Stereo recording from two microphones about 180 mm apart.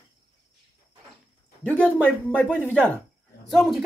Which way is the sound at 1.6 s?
10° left (ahead or behind).